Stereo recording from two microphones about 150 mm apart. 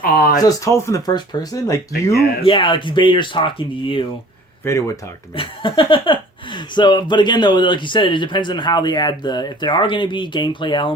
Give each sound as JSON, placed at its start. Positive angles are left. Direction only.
{"t": 0.0, "sound": "speech", "side_deg": 80}
{"t": 0.3, "sound": "speech", "side_deg": 20}
{"t": 2.4, "sound": "speech", "side_deg": 35}
{"t": 4.7, "sound": "speech", "side_deg": 15}
{"t": 5.4, "sound": "speech", "side_deg": 35}